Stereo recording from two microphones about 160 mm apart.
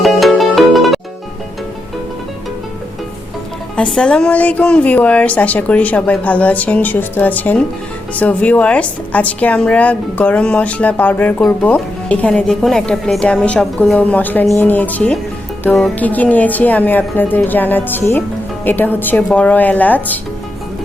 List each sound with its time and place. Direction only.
0.0 s music: centre (ahead or behind)
3.8 s a woman's voice: 5° left (ahead or behind)